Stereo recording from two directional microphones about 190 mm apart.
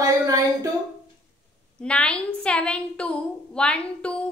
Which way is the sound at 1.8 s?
5° left (ahead or behind).